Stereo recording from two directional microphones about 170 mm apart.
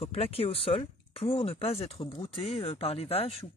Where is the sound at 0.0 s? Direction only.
35° left (ahead or behind).